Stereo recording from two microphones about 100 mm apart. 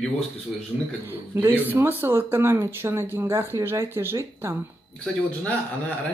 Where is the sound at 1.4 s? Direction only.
20° right (ahead or behind).